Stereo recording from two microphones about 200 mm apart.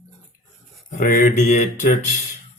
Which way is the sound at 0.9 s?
40° left (ahead or behind).